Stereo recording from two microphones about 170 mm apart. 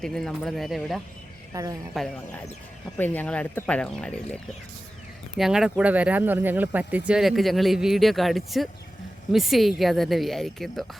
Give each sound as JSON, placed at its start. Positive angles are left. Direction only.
{"t": 0.0, "sound": "speech", "side_deg": 5}
{"t": 1.5, "sound": "speech", "side_deg": -20}
{"t": 1.9, "sound": "speech", "side_deg": 0}
{"t": 5.4, "sound": "speech", "side_deg": -5}